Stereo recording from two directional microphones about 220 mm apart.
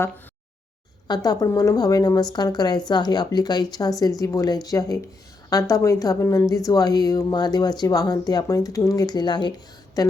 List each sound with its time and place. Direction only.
1.0 s a woman's voice: 20° left (ahead or behind)